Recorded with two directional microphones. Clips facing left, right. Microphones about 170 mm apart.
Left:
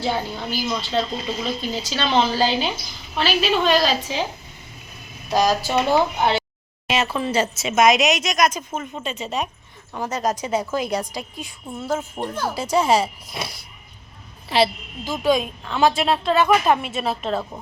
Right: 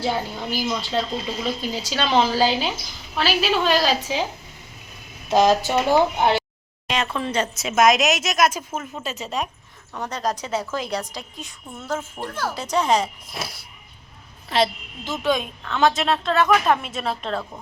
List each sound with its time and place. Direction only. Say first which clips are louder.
0.0 s a woman's voice: even; 10° right (ahead or behind)
5.3 s a woman's voice: right 2 dB; 20° right (ahead or behind)
6.8 s a woman's voice: left 2 dB; 5° left (ahead or behind)
12.5 s a woman's voice: left 2 dB; 10° left (ahead or behind)